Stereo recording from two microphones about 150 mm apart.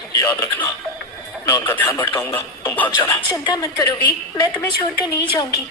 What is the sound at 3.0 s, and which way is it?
A woman's voice, 30° left (ahead or behind).